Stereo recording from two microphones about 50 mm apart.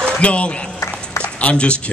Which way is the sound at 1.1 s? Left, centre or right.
Left.